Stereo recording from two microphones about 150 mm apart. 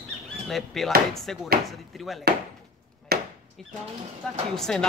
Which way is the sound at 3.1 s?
90° right.